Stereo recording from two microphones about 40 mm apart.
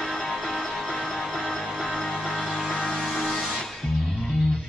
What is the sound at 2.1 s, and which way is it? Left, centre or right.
Music, centre.